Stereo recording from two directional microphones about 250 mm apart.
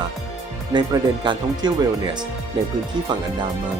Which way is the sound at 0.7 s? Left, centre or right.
Centre.